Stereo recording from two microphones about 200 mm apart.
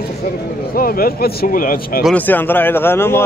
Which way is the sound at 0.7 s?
45° left (ahead or behind).